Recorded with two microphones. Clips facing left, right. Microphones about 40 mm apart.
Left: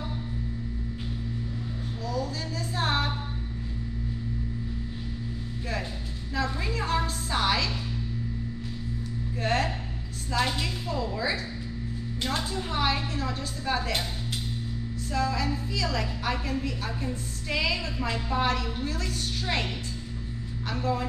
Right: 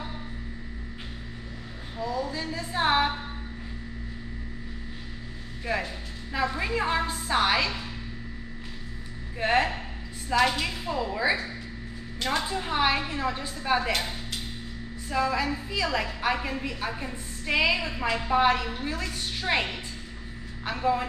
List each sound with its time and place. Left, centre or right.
2.0 s a sound: centre
6.3 s a woman's voice: right
9.4 s a woman's voice: right
15.0 s a woman's voice: right